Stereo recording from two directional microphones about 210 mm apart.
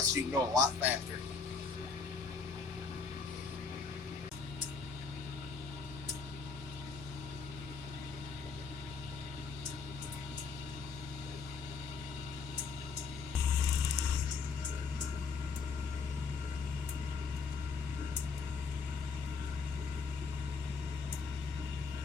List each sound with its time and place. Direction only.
0.0 s speech: 15° right (ahead or behind)